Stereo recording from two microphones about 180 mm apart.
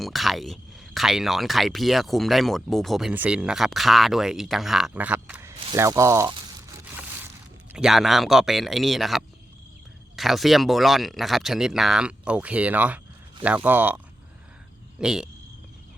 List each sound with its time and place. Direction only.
0.0 s speech: centre (ahead or behind); by 6.7 s 15° right (ahead or behind)
7.7 s speech: 5° right (ahead or behind)